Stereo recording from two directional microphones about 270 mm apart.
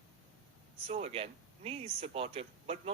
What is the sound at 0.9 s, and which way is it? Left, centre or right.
Speech, right.